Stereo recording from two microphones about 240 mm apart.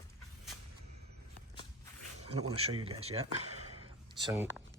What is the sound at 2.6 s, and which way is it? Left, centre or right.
Speech, right.